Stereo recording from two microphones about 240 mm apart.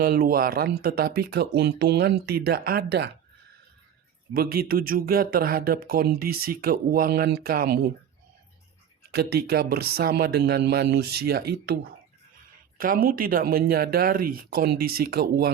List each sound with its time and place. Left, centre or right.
0.0 s speech: right
4.4 s speech: right
9.1 s speech: right